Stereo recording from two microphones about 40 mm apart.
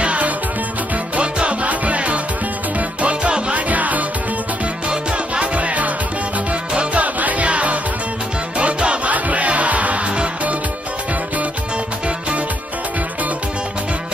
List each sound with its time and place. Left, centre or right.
0.0 s music: right
3.5 s music: right
4.8 s music: right
6.7 s music: right
7.0 s music: right